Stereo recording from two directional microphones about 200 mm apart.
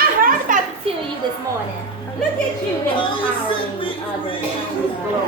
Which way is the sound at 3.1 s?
25° left (ahead or behind).